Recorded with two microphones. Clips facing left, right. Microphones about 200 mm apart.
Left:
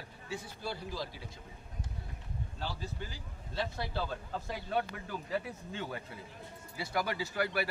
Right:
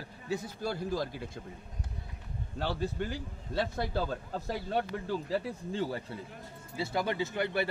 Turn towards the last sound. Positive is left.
turn(degrees=-25)  # may be behind; listen again after turning